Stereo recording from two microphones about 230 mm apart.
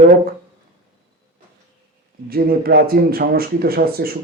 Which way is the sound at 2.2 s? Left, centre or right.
Right.